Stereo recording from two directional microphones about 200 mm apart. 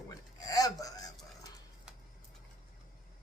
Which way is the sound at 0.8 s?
20° left (ahead or behind).